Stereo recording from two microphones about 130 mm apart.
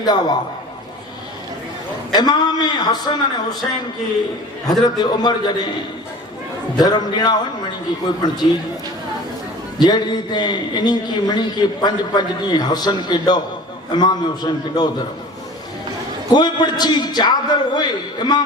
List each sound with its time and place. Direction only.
0.0 s a man's voice: 30° left (ahead or behind)
2.1 s a man's voice: 30° left (ahead or behind)
4.8 s a man's voice: 30° left (ahead or behind)
6.7 s a man's voice: 30° left (ahead or behind)
9.8 s a man's voice: 35° left (ahead or behind)
16.3 s a man's voice: 35° left (ahead or behind)